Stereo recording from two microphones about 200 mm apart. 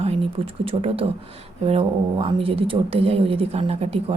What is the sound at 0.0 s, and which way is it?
Speech, 30° right (ahead or behind).